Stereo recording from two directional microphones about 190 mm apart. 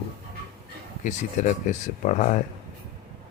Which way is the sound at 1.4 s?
40° left (ahead or behind).